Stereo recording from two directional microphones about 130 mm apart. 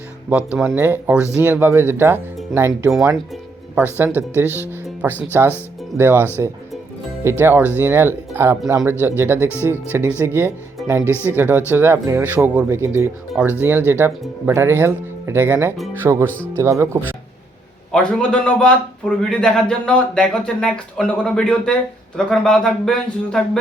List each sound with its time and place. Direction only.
0.3 s speech: 10° right (ahead or behind)
17.9 s a man's voice: 5° left (ahead or behind)